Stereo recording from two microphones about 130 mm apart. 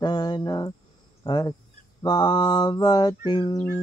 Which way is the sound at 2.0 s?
30° left (ahead or behind).